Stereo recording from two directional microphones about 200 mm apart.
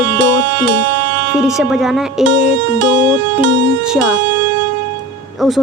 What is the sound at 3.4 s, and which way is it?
Speech, 70° right (ahead or behind).